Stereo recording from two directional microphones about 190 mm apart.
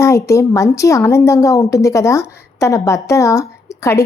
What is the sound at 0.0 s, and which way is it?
A woman's voice, 15° left (ahead or behind).